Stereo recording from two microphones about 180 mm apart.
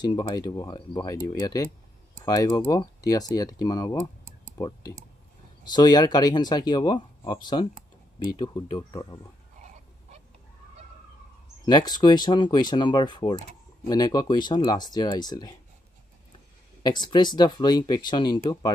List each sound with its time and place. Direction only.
0.0 s speech: 25° left (ahead or behind)
11.6 s speech: 20° left (ahead or behind)
16.8 s speech: 25° left (ahead or behind)